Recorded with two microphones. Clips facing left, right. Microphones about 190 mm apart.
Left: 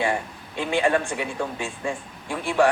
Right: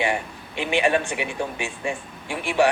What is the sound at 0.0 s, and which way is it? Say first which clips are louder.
A man's voice: even; 15° right (ahead or behind).